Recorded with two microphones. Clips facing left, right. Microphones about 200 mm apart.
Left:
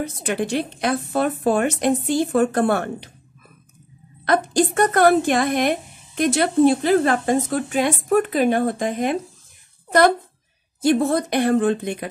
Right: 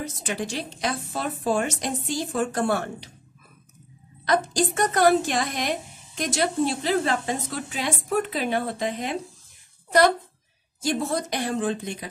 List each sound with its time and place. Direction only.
0.0 s a woman's voice: 60° left (ahead or behind)
4.2 s a woman's voice: 55° left (ahead or behind)